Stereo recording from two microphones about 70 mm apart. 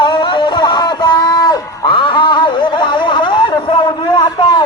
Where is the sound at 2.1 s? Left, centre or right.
Left.